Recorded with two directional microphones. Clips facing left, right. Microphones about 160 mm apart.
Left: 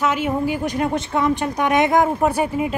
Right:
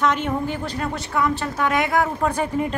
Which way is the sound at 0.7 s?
20° left (ahead or behind).